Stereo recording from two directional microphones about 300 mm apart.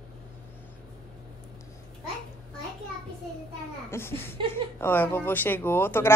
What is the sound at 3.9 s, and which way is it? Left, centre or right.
Speech, centre.